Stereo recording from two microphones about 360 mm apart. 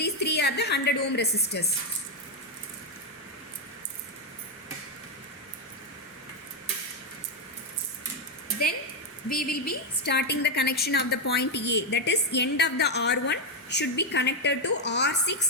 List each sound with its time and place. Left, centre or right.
0.0 s a woman's voice: left
9.3 s a woman's voice: left